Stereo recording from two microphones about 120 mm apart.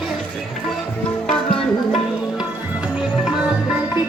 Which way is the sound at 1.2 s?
5° left (ahead or behind).